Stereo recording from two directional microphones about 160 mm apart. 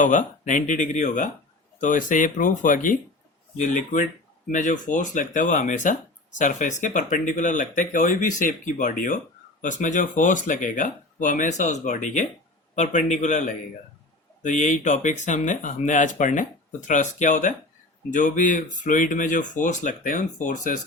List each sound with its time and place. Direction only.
0.0 s speech: 55° left (ahead or behind)